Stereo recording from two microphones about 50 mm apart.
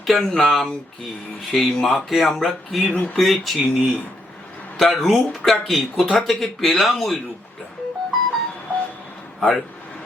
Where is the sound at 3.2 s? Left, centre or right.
Centre.